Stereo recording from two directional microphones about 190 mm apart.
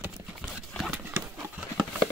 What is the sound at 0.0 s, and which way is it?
Clip-clop, 5° right (ahead or behind).